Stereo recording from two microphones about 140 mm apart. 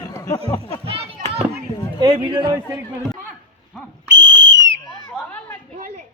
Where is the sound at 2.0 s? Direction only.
35° right (ahead or behind).